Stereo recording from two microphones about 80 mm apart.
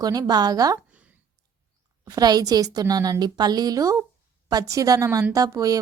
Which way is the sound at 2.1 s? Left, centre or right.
Right.